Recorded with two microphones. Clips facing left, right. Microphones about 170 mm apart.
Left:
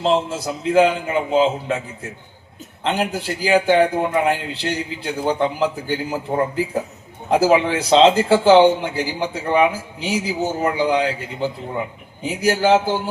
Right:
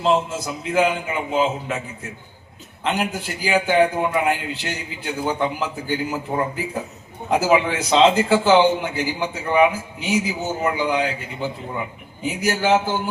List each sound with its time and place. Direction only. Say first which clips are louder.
0.0 s a man's voice: left 1 dB; 35° left (ahead or behind)
2.8 s a man's voice: left 2 dB; 30° left (ahead or behind)